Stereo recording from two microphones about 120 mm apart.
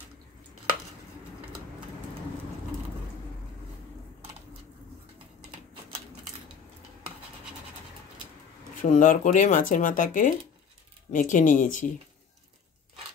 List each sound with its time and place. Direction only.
8.8 s speech: 90° left